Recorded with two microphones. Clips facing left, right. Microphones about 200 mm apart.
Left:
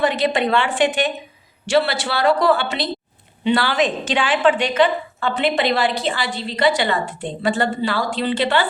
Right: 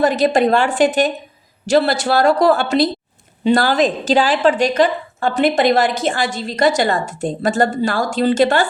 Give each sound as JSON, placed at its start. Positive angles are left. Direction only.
{"t": 0.0, "sound": "a woman's voice", "side_deg": -45}